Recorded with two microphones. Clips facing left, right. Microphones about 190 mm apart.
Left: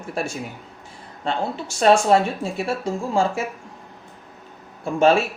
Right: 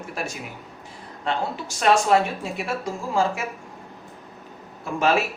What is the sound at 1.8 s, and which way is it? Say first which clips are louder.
Speech: left 3 dB; 30° left (ahead or behind).